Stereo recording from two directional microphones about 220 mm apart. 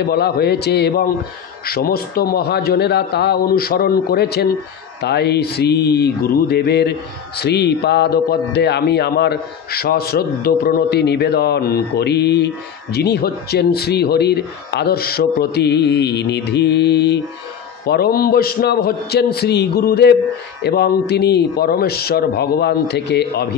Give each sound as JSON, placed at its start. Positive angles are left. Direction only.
{"t": 0.0, "sound": "mantra", "side_deg": 45}